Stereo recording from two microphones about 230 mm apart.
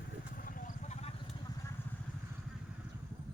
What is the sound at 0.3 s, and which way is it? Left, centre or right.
Vehicle, left.